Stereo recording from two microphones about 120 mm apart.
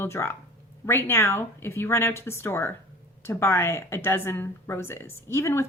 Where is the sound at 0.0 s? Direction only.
20° left (ahead or behind).